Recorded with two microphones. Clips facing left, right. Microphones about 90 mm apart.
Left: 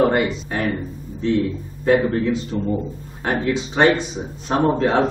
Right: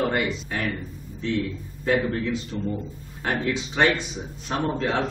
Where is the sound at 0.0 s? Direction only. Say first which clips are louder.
Left 7 dB; 35° left (ahead or behind).